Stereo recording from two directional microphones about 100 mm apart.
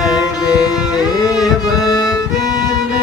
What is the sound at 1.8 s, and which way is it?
Violin, 40° left (ahead or behind).